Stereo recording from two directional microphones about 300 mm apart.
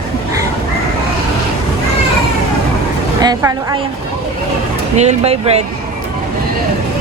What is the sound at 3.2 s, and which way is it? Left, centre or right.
Speech, centre.